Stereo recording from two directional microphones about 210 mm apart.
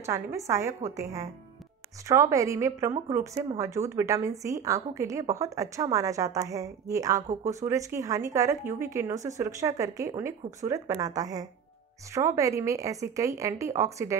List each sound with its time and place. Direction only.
0.0 s a woman's voice: 15° right (ahead or behind)